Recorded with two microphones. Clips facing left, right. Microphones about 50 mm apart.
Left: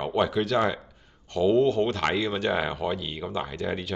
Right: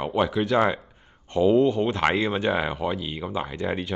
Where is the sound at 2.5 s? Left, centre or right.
Centre.